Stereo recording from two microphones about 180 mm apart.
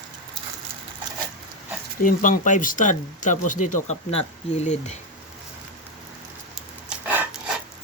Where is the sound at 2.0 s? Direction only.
50° left (ahead or behind).